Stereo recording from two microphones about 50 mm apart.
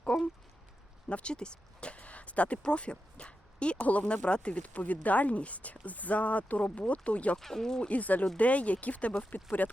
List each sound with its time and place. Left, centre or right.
0.1 s speech: left
7.3 s speech: centre
7.9 s speech: left